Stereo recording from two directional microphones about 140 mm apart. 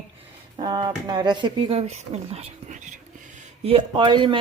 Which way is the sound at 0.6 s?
30° right (ahead or behind).